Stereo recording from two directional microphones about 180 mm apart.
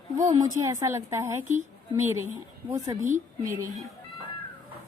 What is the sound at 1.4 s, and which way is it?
Speech, 40° right (ahead or behind).